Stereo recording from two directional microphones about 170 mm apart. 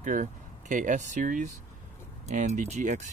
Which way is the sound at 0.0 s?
50° right (ahead or behind).